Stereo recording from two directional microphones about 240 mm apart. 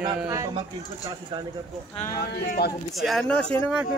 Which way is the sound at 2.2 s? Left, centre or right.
Left.